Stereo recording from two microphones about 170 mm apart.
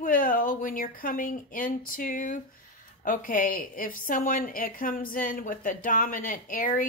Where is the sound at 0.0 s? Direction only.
55° left (ahead or behind).